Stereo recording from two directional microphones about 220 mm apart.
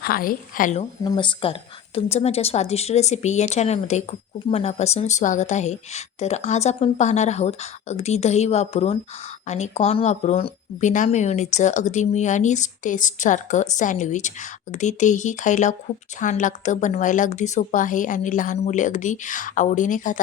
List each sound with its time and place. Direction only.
0.0 s speech: 40° left (ahead or behind)
1.0 s a woman's voice: 20° left (ahead or behind)